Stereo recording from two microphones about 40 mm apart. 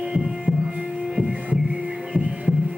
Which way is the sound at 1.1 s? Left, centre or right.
Centre.